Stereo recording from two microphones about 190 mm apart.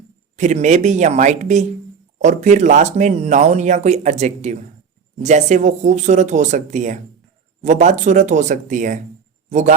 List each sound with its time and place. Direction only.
0.3 s speech: 40° right (ahead or behind)